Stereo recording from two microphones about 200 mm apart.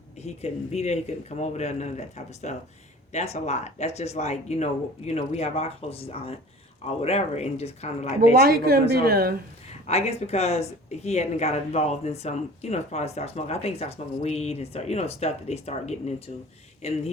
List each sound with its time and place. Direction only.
0.2 s speech: 35° left (ahead or behind)
8.4 s a woman's voice: 50° right (ahead or behind)
9.8 s speech: 30° left (ahead or behind)